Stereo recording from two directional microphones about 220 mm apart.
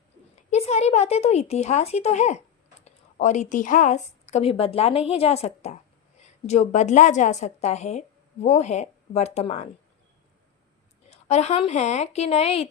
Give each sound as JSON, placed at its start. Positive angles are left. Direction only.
{"t": 0.3, "sound": "a woman's voice", "side_deg": 30}
{"t": 11.1, "sound": "speech", "side_deg": 30}